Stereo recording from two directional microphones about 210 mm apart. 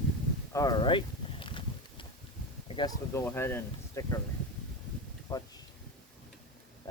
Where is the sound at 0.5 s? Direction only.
15° left (ahead or behind).